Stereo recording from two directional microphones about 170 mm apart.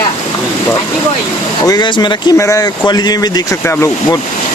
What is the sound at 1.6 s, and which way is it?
Speech, 25° left (ahead or behind).